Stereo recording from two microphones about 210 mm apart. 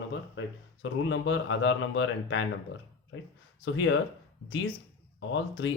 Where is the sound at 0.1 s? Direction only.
60° left (ahead or behind).